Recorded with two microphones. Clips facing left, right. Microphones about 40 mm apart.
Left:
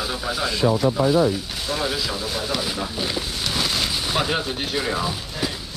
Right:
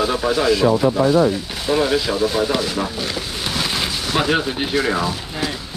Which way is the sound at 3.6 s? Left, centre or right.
Centre.